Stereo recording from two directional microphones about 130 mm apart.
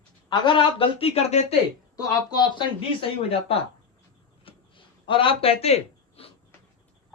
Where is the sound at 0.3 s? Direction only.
40° left (ahead or behind); by 1.5 s 55° left (ahead or behind).